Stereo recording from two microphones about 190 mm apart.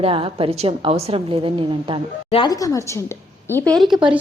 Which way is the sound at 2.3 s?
20° left (ahead or behind).